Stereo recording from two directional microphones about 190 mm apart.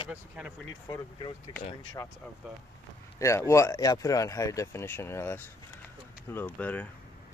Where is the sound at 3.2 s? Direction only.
15° left (ahead or behind).